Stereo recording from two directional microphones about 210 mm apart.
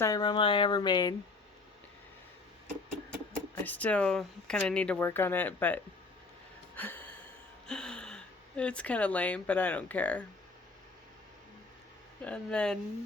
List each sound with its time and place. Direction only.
0.0 s speech: 20° left (ahead or behind)
3.5 s speech: 5° left (ahead or behind)
6.7 s a sound: 10° left (ahead or behind)
7.7 s speech: 5° left (ahead or behind)
12.2 s speech: 5° left (ahead or behind)